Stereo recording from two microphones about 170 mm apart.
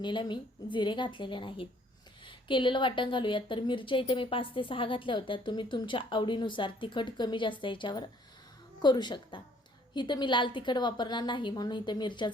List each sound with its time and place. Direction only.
0.0 s speech: 25° left (ahead or behind)